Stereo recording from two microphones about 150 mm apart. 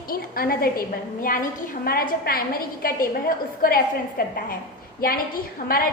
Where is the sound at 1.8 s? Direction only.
80° left.